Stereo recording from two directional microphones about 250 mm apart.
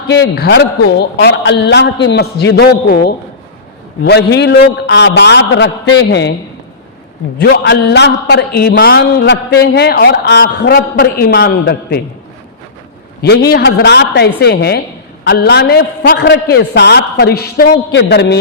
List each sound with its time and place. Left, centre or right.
0.1 s a man's voice: left
7.3 s a man's voice: left
13.2 s a man's voice: left